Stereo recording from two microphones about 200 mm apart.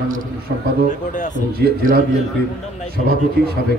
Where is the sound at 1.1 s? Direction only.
40° left (ahead or behind).